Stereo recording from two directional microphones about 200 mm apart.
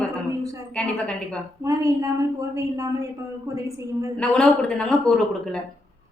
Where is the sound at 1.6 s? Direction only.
15° right (ahead or behind).